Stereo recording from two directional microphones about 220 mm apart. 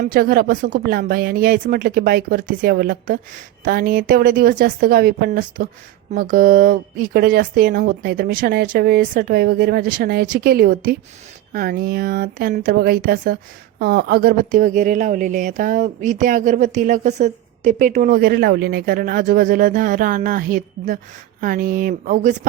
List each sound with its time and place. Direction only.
0.0 s speech: 40° right (ahead or behind)